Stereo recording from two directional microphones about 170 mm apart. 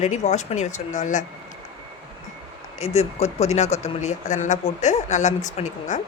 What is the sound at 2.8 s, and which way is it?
A woman's voice, 40° left (ahead or behind).